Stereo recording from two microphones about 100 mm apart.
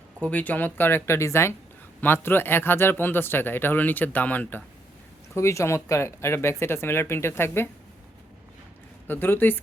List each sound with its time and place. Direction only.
0.2 s speech: 15° left (ahead or behind)
5.3 s speech: 30° left (ahead or behind)
9.0 s speech: 20° left (ahead or behind)